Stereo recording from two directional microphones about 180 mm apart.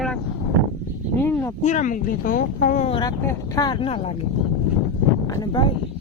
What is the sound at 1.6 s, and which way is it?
Speech, 45° left (ahead or behind).